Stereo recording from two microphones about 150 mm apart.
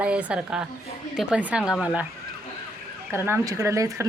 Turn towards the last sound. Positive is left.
turn(degrees=-20)  # may be behind; listen again after turning